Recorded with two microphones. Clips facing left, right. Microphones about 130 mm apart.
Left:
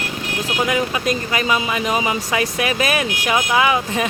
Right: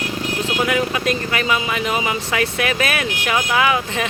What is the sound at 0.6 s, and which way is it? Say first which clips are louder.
Speech: even; 20° left (ahead or behind).